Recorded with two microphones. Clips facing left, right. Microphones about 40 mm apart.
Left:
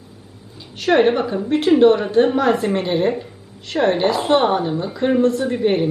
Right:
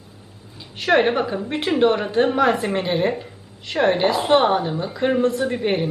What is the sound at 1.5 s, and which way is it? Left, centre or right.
A woman's voice, centre.